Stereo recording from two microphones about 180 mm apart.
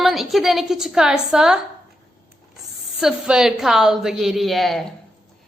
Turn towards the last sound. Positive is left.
turn(degrees=0)  # may be behind; listen again after turning